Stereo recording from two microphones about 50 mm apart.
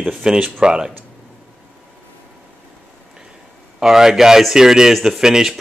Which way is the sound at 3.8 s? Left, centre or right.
Centre.